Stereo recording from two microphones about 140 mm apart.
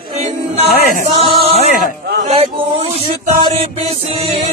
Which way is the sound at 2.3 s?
45° right (ahead or behind).